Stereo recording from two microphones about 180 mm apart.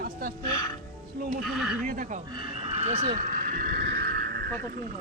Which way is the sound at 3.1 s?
45° right (ahead or behind).